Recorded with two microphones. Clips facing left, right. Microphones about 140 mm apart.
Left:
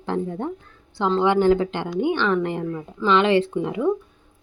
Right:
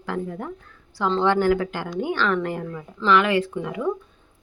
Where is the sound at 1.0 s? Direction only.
10° left (ahead or behind).